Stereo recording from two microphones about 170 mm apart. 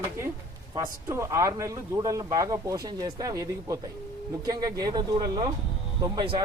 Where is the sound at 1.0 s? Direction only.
15° right (ahead or behind).